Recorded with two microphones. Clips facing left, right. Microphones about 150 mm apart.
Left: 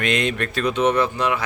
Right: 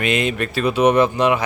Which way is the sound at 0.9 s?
20° right (ahead or behind).